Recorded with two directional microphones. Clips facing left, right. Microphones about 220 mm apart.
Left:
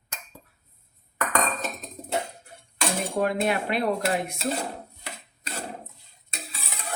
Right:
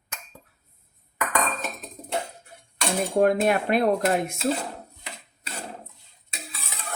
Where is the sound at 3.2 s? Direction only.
50° right (ahead or behind).